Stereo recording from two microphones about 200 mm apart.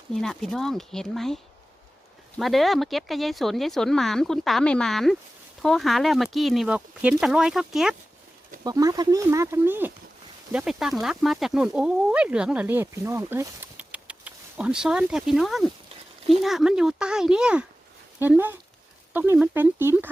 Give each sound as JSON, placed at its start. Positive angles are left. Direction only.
{"t": 0.1, "sound": "speech", "side_deg": 0}
{"t": 2.4, "sound": "speech", "side_deg": 0}
{"t": 8.6, "sound": "speech", "side_deg": -15}